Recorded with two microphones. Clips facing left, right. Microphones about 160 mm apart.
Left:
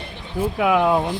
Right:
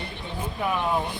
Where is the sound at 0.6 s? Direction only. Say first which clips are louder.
Left 8 dB; 90° left.